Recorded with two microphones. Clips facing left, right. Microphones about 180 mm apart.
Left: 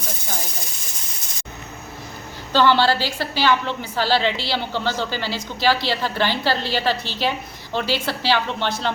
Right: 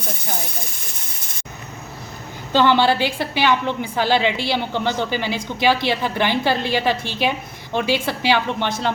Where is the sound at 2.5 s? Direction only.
20° right (ahead or behind).